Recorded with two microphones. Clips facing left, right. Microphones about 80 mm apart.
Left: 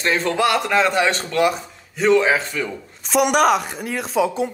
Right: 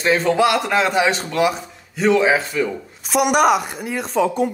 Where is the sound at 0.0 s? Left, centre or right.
Centre.